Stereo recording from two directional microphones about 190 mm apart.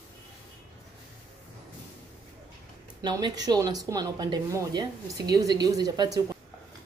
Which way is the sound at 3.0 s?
20° right (ahead or behind).